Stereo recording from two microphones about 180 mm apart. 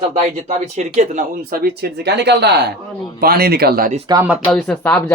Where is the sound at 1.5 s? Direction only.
60° right (ahead or behind).